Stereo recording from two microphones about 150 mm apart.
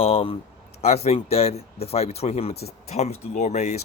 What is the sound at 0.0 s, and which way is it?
Speech, 40° left (ahead or behind).